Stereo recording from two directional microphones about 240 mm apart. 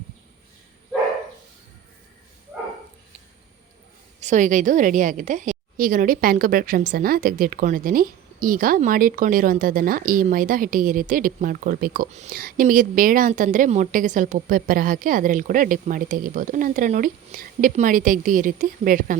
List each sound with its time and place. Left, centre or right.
4.2 s a woman's voice: right